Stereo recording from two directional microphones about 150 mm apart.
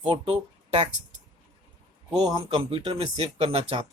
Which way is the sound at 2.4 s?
35° right (ahead or behind).